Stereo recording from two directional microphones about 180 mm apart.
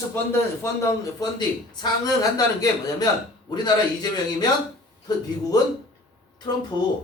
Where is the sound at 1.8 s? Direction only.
20° left (ahead or behind).